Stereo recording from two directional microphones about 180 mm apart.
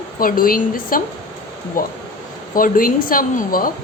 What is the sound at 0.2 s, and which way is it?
Speech, 55° left (ahead or behind).